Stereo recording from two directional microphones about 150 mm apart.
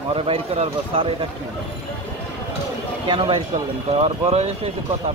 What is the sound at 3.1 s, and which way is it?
Speech, 35° right (ahead or behind).